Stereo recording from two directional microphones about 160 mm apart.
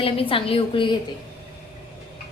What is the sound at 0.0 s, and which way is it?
Speech, 35° left (ahead or behind).